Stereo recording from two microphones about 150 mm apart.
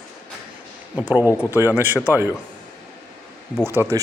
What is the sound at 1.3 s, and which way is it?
Speech, 20° left (ahead or behind).